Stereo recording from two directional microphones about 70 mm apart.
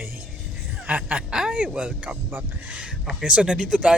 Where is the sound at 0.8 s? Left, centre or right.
Right.